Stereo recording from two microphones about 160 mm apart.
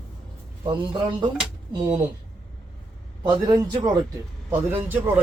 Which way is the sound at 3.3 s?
25° right (ahead or behind).